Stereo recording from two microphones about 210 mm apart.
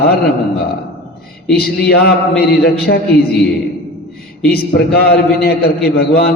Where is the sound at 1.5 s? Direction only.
50° left (ahead or behind).